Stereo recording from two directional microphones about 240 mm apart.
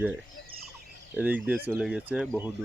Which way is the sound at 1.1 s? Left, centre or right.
Centre.